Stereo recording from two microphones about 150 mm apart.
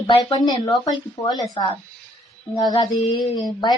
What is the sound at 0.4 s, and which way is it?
Speech, 25° left (ahead or behind).